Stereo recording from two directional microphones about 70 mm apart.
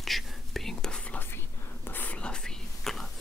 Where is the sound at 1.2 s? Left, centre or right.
Left; by 3.1 s centre.